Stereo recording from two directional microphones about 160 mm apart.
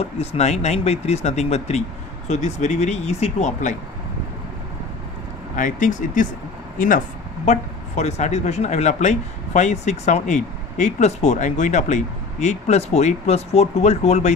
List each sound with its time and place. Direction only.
0.0 s speech: 40° left (ahead or behind)
5.6 s speech: 50° left (ahead or behind)
7.4 s speech: 45° left (ahead or behind)